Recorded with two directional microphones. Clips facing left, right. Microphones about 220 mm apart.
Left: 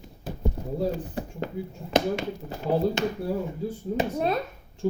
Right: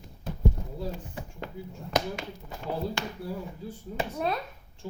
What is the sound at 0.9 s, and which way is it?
A child's voice, 35° left (ahead or behind).